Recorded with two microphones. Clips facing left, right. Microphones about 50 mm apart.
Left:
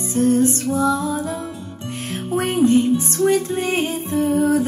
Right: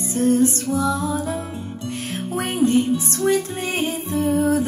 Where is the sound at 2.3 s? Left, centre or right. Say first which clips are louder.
Left 3 dB; left.